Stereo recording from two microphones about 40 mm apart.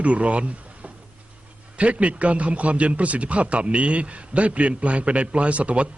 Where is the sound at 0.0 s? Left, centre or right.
Right.